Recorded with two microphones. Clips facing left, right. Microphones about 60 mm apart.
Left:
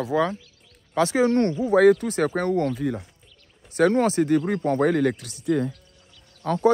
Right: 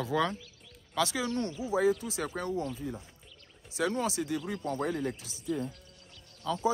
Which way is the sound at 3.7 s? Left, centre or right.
Left.